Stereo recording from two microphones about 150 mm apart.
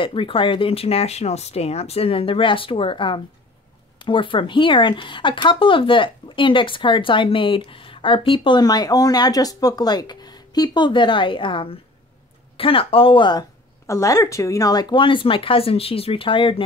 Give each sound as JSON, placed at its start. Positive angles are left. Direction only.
{"t": 0.0, "sound": "speech", "side_deg": 35}